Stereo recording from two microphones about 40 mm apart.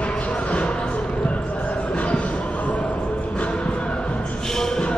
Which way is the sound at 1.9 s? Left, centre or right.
Left.